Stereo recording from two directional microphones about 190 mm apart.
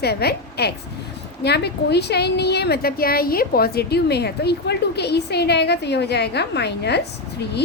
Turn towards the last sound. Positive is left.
turn(degrees=60)  # may be behind; listen again after turning